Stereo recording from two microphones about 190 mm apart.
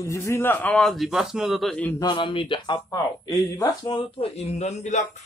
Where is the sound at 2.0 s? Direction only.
25° left (ahead or behind).